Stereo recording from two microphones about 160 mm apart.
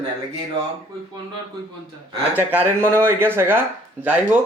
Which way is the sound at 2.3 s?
10° right (ahead or behind).